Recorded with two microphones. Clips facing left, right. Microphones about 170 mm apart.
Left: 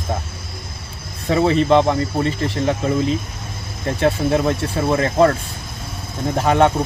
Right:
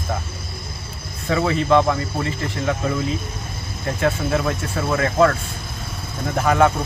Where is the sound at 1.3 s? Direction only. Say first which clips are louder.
Left 3 dB; 30° left (ahead or behind).